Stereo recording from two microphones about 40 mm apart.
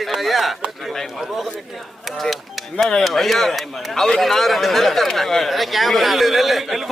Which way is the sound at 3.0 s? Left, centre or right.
Centre.